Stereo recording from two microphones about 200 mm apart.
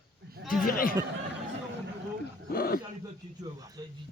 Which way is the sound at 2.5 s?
45° left (ahead or behind).